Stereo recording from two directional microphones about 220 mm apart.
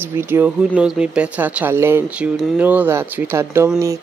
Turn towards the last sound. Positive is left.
turn(degrees=-10)  # may be behind; listen again after turning